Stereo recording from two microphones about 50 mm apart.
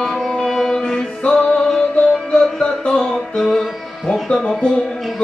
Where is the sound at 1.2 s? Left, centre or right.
Left.